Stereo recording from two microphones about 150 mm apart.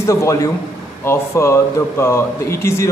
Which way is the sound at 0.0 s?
20° left (ahead or behind).